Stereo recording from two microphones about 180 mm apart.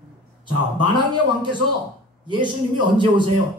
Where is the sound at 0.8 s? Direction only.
25° right (ahead or behind).